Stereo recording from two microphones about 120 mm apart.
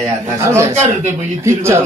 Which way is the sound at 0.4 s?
25° right (ahead or behind).